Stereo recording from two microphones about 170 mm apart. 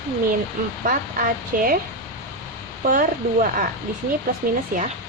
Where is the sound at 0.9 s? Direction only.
55° right (ahead or behind).